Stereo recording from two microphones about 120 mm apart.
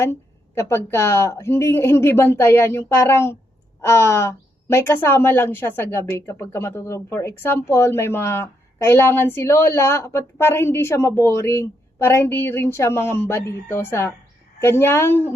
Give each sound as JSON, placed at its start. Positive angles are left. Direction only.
{"t": 0.0, "sound": "a woman's voice", "side_deg": 20}